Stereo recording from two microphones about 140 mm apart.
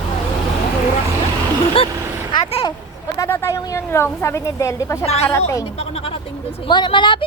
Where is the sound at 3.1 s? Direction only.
15° left (ahead or behind).